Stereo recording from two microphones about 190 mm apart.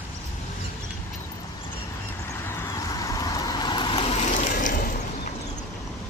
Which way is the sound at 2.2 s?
15° left (ahead or behind).